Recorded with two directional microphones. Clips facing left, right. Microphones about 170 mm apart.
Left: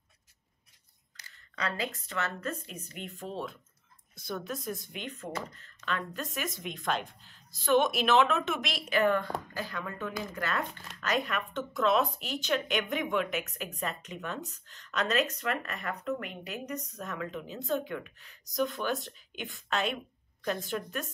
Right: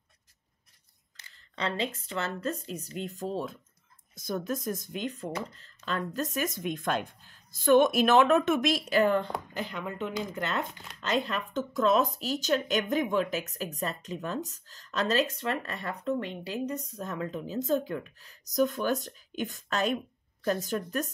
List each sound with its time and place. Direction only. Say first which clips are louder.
1.1 s speech: right 1 dB; 25° right (ahead or behind)